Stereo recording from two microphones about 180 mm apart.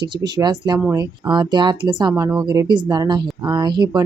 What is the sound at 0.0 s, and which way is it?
Speech, 25° right (ahead or behind).